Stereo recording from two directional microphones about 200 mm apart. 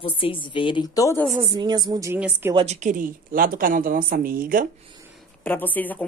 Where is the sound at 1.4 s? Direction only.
20° right (ahead or behind).